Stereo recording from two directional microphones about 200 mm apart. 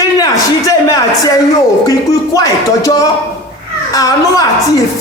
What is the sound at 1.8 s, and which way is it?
A woman's voice, 15° left (ahead or behind).